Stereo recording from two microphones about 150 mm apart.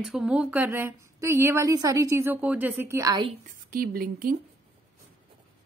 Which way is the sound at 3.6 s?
80° right.